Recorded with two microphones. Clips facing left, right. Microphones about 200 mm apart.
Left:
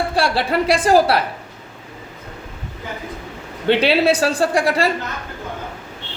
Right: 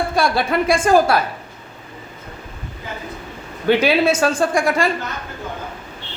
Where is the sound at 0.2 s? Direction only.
30° left (ahead or behind).